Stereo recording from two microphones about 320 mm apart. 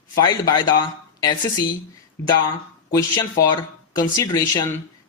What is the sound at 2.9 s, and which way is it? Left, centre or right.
Speech, centre.